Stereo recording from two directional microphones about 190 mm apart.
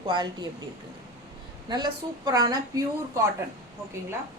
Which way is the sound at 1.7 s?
20° right (ahead or behind).